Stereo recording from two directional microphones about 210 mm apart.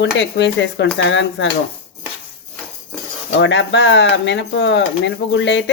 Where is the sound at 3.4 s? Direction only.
60° left (ahead or behind).